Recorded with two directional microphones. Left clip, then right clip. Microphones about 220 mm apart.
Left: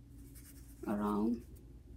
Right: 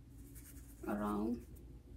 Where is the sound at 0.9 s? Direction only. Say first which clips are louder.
Left 4 dB; 25° left (ahead or behind).